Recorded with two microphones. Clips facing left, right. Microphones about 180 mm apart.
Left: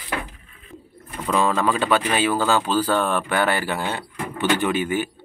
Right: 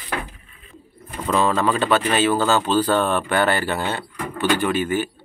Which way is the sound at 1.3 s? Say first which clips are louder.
Right 1 dB; 10° left (ahead or behind).